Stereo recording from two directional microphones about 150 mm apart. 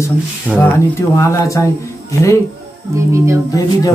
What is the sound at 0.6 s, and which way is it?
Speech, 20° left (ahead or behind).